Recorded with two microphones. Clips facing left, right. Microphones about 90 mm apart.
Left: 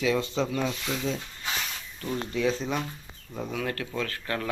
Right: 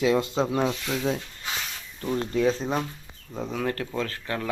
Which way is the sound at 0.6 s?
60° right (ahead or behind).